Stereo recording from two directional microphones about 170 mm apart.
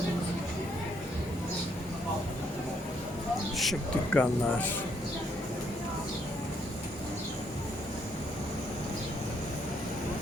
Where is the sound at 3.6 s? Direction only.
5° left (ahead or behind).